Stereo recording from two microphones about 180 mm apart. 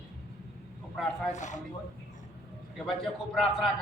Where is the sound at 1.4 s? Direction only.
40° left (ahead or behind).